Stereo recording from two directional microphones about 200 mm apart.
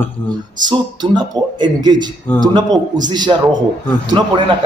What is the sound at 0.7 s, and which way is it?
A man's voice, 20° right (ahead or behind).